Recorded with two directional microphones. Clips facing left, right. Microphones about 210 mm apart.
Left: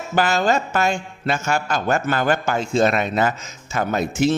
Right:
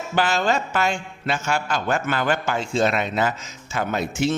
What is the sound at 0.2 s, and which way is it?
A man's voice, 45° left (ahead or behind).